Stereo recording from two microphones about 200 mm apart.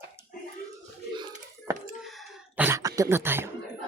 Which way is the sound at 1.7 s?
15° right (ahead or behind).